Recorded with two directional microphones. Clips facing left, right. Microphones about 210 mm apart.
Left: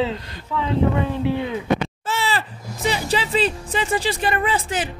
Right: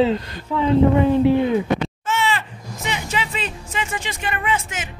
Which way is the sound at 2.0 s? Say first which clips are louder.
Right 1 dB; 35° left (ahead or behind).